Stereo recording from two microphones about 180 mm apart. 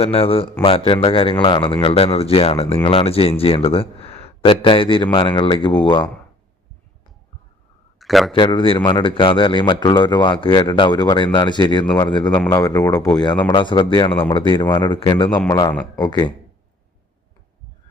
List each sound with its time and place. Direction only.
0.0 s a man's voice: 30° left (ahead or behind)
7.9 s a sound: centre (ahead or behind)
8.3 s speech: 25° left (ahead or behind)